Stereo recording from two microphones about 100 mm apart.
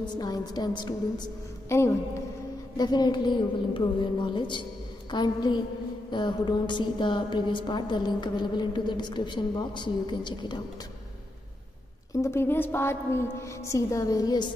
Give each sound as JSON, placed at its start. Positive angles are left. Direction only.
{"t": 0.0, "sound": "a woman's voice", "side_deg": 45}
{"t": 1.7, "sound": "a woman's voice", "side_deg": 30}
{"t": 2.8, "sound": "a woman's voice", "side_deg": 45}
{"t": 12.1, "sound": "a woman's voice", "side_deg": 30}